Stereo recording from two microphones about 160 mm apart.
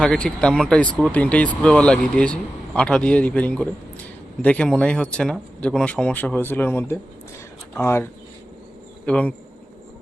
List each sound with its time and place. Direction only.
0.0 s speech: 5° left (ahead or behind)
9.0 s speech: 10° left (ahead or behind)